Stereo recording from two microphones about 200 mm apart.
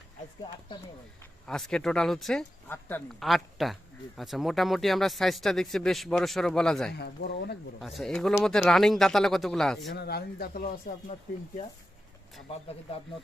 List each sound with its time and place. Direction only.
1.5 s speech: 5° left (ahead or behind)
6.9 s speech: 55° left (ahead or behind)
7.8 s speech: centre (ahead or behind)
9.9 s speech: 55° left (ahead or behind)
12.5 s speech: 30° left (ahead or behind)